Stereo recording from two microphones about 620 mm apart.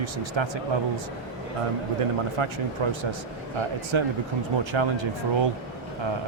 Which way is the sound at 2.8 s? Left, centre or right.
Right.